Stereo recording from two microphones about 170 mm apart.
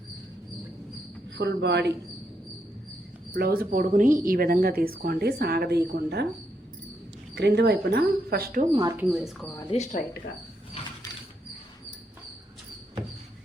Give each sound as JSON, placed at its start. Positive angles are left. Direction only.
{"t": 1.4, "sound": "speech", "side_deg": -90}
{"t": 3.3, "sound": "speech", "side_deg": -60}
{"t": 7.3, "sound": "speech", "side_deg": -80}
{"t": 8.7, "sound": "speech", "side_deg": -25}
{"t": 9.0, "sound": "speech", "side_deg": 0}
{"t": 9.7, "sound": "speech", "side_deg": 40}
{"t": 10.8, "sound": "mechanisms", "side_deg": 35}